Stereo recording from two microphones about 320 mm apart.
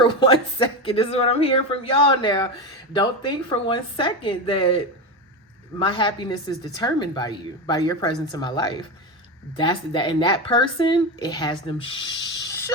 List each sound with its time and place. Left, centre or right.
0.0 s speech: centre
5.8 s speech: centre